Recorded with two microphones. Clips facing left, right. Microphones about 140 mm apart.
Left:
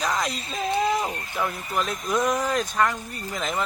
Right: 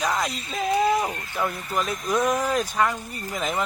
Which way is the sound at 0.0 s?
Centre (ahead or behind).